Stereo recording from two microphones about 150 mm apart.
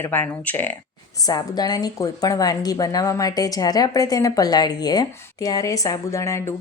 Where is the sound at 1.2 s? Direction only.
25° left (ahead or behind).